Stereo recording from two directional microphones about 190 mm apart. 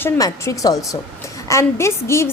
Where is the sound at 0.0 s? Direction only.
15° left (ahead or behind).